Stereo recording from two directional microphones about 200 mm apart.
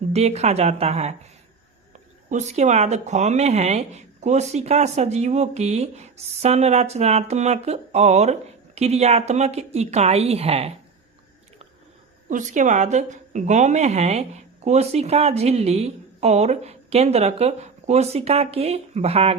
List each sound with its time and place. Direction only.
0.1 s speech: 30° right (ahead or behind)
12.3 s speech: 40° right (ahead or behind)